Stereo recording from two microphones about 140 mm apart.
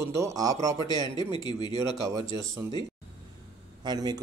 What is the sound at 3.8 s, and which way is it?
Speech, 30° right (ahead or behind).